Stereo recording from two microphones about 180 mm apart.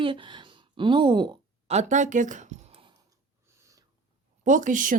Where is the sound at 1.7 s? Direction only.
45° right (ahead or behind).